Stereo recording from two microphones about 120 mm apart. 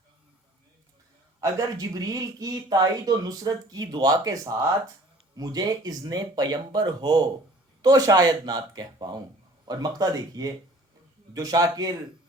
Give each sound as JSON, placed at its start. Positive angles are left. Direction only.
{"t": 1.4, "sound": "speech", "side_deg": -30}